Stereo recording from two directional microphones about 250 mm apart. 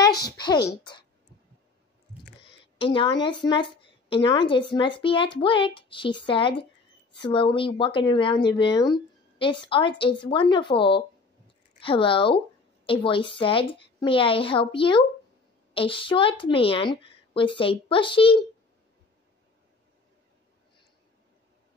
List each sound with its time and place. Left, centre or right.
0.7 s a woman's voice: centre
2.5 s speech: left